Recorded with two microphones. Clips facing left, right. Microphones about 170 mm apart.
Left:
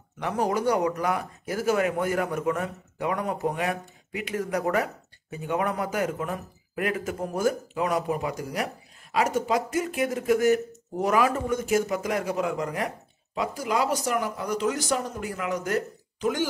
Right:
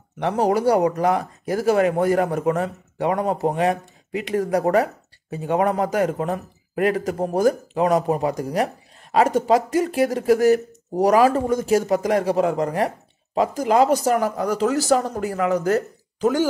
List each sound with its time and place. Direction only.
0.2 s speech: 30° right (ahead or behind)